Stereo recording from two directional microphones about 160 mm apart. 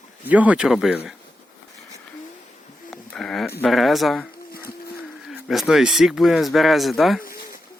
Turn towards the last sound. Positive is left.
turn(degrees=60)  # may be behind; listen again after turning